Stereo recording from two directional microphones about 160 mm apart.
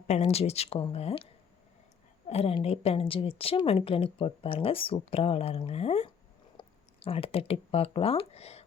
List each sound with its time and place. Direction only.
0.1 s a woman's voice: 40° left (ahead or behind)